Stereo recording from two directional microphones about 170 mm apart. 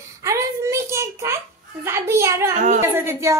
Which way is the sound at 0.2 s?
15° right (ahead or behind).